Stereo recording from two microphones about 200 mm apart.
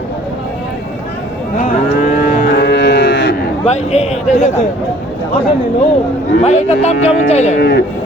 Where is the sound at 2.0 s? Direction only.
50° left (ahead or behind).